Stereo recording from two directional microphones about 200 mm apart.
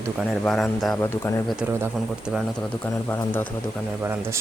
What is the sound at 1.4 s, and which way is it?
Speech, 5° right (ahead or behind).